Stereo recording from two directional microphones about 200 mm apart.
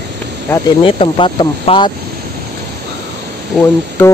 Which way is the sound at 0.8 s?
25° left (ahead or behind).